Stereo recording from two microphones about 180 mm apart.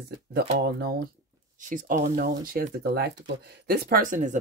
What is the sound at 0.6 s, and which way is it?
Speech, 65° right (ahead or behind).